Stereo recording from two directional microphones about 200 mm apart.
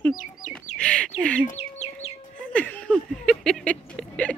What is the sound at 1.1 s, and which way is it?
Speech, 5° left (ahead or behind).